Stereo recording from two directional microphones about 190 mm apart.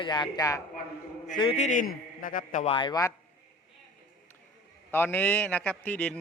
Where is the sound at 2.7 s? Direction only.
25° left (ahead or behind).